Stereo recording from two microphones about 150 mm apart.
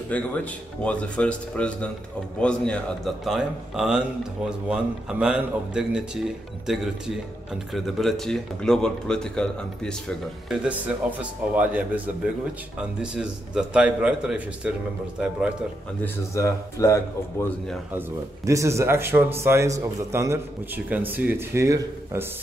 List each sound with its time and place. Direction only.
0.1 s a man's voice: 10° left (ahead or behind)
10.6 s a man's voice: 10° right (ahead or behind)
13.0 s a man's voice: 5° right (ahead or behind)
16.0 s speech: 20° left (ahead or behind)
17.9 s a man's voice: 20° right (ahead or behind)